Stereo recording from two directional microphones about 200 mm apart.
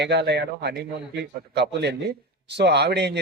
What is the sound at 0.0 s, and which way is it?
A man's voice, 60° right (ahead or behind).